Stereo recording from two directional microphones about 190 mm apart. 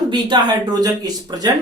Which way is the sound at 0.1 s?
25° right (ahead or behind).